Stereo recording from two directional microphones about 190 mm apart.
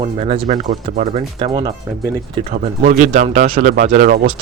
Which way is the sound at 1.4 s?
25° right (ahead or behind).